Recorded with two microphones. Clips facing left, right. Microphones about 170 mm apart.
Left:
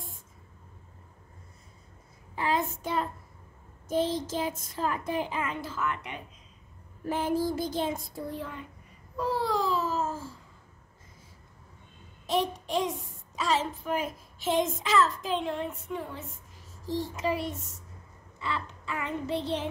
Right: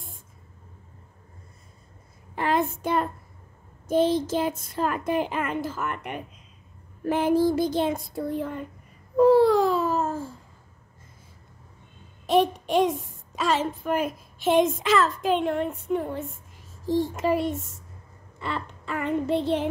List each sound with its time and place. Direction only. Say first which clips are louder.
2.3 s child singing: right 4 dB; 60° right (ahead or behind)
3.9 s speech: right 6 dB; 65° right (ahead or behind); by 6.2 s 50° right (ahead or behind)
7.1 s child singing: right 7 dB; 70° right (ahead or behind); by 8.6 s 50° right (ahead or behind)
9.1 s babbling: right 13 dB; 55° right (ahead or behind)
12.3 s a woman's voice: right 7 dB; 60° right (ahead or behind)